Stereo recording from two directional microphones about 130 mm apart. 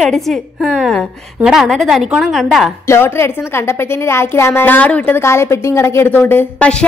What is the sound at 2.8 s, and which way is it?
A woman's voice, 20° left (ahead or behind).